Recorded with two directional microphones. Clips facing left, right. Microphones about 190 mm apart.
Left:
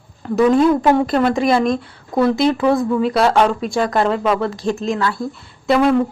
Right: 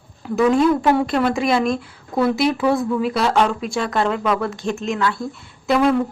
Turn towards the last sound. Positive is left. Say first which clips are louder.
# left 2 dB
turn(degrees=0)  # may be behind; listen again after turning